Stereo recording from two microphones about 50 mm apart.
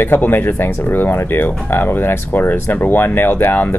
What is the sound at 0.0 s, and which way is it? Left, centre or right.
Speech, left.